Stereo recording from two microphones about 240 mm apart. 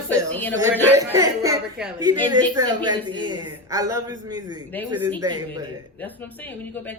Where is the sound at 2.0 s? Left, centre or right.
Centre.